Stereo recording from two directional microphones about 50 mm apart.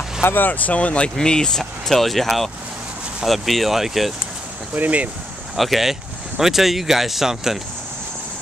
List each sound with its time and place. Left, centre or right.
0.2 s speech: left
1.1 s speech: centre
1.6 s speech: centre
4.7 s speech: right
5.6 s speech: centre